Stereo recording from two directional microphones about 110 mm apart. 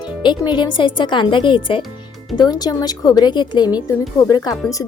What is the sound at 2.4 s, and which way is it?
A woman's voice, 35° left (ahead or behind).